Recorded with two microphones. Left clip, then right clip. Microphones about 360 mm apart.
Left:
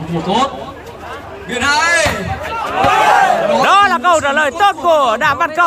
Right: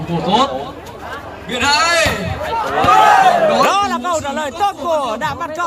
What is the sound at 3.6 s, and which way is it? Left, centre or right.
Speech, centre.